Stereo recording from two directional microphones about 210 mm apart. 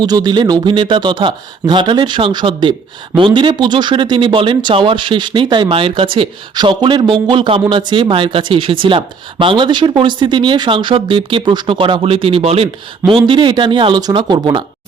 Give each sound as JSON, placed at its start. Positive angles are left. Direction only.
{"t": 0.0, "sound": "speech", "side_deg": -20}